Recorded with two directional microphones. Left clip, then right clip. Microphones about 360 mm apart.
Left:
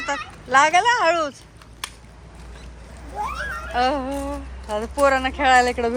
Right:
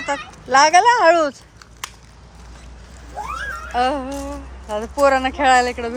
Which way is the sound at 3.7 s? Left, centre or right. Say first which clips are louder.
Right 1 dB; centre.